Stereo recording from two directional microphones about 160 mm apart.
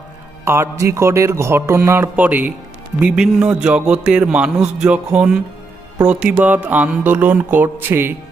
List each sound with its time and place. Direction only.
0.4 s speech: 15° right (ahead or behind)